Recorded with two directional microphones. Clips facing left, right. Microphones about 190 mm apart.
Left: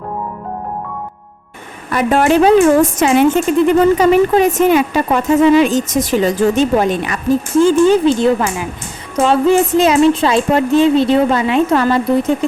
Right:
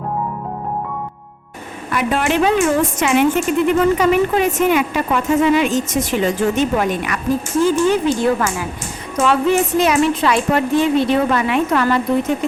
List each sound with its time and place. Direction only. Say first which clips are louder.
1.9 s a woman's voice: left 6 dB; 45° left (ahead or behind); by 8.6 s 20° left (ahead or behind)
9.1 s a woman's voice: left 4 dB; 30° left (ahead or behind)